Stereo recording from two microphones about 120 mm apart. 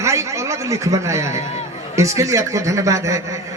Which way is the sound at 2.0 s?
25° right (ahead or behind).